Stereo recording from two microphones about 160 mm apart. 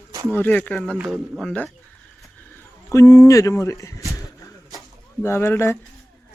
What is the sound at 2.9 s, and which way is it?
Speech, 20° left (ahead or behind).